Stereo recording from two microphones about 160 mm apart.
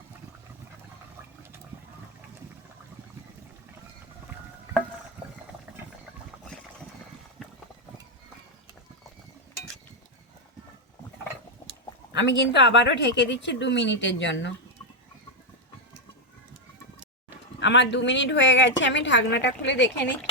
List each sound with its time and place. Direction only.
12.1 s a woman's voice: 90° left
17.7 s a woman's voice: 90° left